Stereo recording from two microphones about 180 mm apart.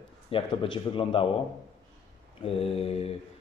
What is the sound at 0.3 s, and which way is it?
Speech, 30° left (ahead or behind).